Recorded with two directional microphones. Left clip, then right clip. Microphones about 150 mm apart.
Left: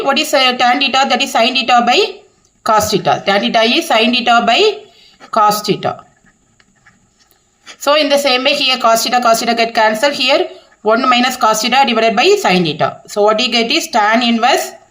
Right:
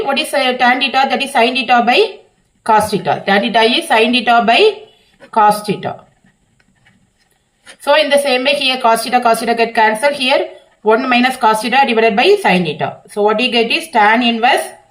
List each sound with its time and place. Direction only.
0.0 s speech: 45° left (ahead or behind)
7.8 s speech: 45° left (ahead or behind)